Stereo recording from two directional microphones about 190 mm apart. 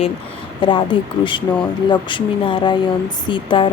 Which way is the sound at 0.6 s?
25° left (ahead or behind).